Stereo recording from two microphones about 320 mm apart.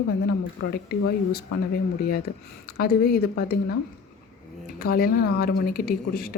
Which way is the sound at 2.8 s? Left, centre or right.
Left.